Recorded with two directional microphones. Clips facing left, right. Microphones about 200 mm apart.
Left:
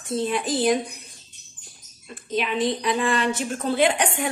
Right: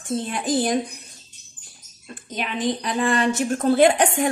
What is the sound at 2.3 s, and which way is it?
A woman's voice, 40° right (ahead or behind).